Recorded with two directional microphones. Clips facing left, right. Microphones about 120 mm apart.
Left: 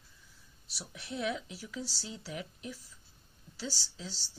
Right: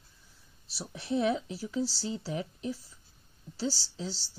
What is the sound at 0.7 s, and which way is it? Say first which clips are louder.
Speech: right 10 dB; 30° right (ahead or behind).